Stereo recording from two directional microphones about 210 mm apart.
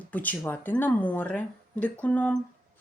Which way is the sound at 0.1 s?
5° left (ahead or behind).